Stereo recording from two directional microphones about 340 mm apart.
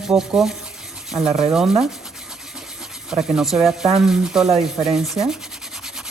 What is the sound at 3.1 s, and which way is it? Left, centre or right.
Speech, centre.